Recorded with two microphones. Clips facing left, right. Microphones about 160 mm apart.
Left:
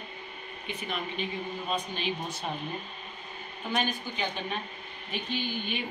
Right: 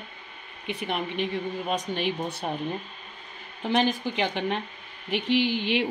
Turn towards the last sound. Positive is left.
turn(degrees=-90)